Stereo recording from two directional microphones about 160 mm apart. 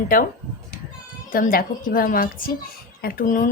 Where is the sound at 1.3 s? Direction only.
60° left (ahead or behind).